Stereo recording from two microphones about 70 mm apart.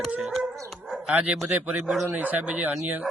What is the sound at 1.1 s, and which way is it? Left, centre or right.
Speech, right.